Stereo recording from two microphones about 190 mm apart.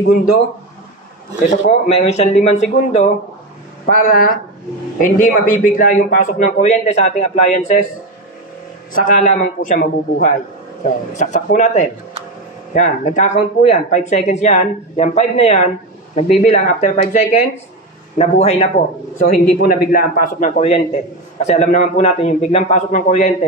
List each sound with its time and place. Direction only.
1.7 s a man's voice: 35° left (ahead or behind)
3.8 s a man's voice: 50° left (ahead or behind)
8.9 s a man's voice: 45° left (ahead or behind)
13.0 s a man's voice: 40° left (ahead or behind)
19.1 s a man's voice: 50° left (ahead or behind)